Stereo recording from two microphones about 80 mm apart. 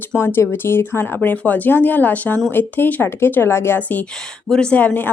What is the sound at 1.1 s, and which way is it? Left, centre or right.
Speech, centre.